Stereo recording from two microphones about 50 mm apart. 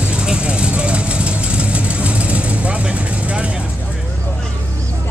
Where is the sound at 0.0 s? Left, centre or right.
Centre.